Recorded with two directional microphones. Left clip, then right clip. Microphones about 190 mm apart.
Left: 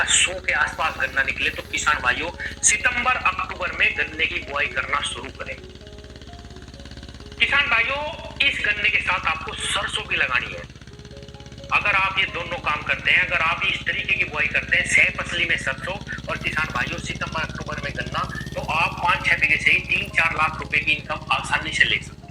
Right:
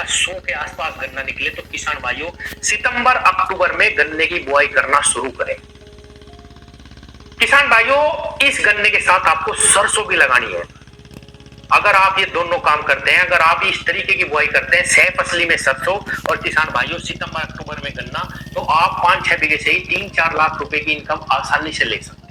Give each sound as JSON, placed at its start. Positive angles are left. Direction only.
{"t": 0.0, "sound": "speech", "side_deg": -35}
{"t": 2.8, "sound": "a man's voice", "side_deg": -60}
{"t": 7.3, "sound": "a man's voice", "side_deg": -60}
{"t": 11.7, "sound": "a man's voice", "side_deg": -60}
{"t": 18.5, "sound": "a man's voice", "side_deg": -55}